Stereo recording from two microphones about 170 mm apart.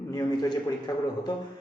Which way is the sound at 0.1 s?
20° left (ahead or behind).